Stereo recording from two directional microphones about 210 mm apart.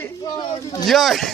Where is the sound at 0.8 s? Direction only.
Centre (ahead or behind).